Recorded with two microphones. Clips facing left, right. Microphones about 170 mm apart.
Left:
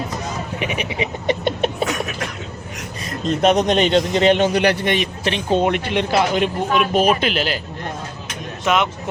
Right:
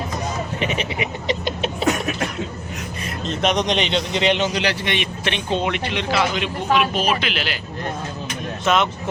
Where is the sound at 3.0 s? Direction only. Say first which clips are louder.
Left 5 dB; 45° left (ahead or behind).